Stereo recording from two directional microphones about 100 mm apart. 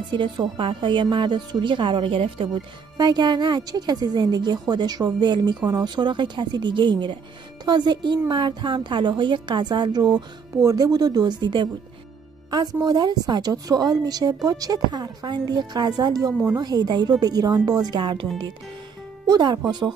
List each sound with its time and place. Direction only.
0.1 s speech: 55° right (ahead or behind)
3.0 s a woman's voice: 45° right (ahead or behind)
12.8 s a woman's voice: 45° right (ahead or behind)
19.2 s speech: 45° right (ahead or behind)